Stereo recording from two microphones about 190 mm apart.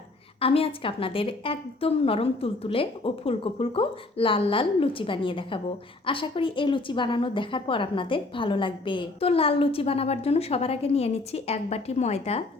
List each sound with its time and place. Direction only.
0.3 s a woman's voice: 30° left (ahead or behind)